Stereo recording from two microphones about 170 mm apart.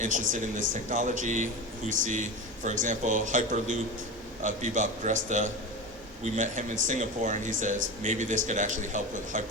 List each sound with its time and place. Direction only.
0.0 s speech: 50° right (ahead or behind)